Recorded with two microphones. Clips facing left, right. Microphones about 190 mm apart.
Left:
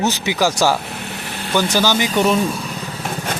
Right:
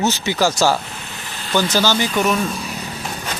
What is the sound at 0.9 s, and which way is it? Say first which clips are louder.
Vehicle: left 5 dB; 60° left (ahead or behind).